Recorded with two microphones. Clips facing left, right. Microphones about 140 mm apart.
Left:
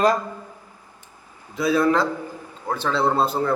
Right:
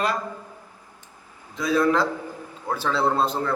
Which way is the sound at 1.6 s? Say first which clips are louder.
Left 2 dB; 5° left (ahead or behind).